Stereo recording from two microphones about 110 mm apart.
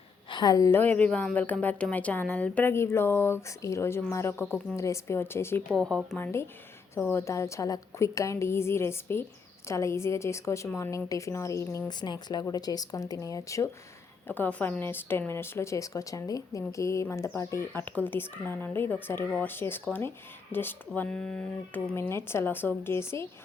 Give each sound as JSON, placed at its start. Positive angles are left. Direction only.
{"t": 0.3, "sound": "a woman's voice", "side_deg": 40}
{"t": 0.7, "sound": "a woman's voice", "side_deg": 15}
{"t": 5.6, "sound": "speech", "side_deg": 5}
{"t": 6.1, "sound": "a woman's voice", "side_deg": 20}
{"t": 11.9, "sound": "speech", "side_deg": 40}
{"t": 14.3, "sound": "a woman's voice", "side_deg": 15}
{"t": 17.8, "sound": "a woman's voice", "side_deg": 15}
{"t": 21.9, "sound": "a woman's voice", "side_deg": 20}